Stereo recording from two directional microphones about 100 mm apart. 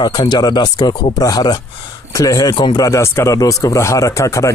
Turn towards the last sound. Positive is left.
turn(degrees=30)  # may be behind; listen again after turning